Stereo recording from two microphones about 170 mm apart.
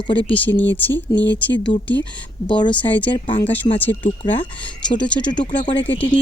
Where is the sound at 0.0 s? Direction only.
30° left (ahead or behind).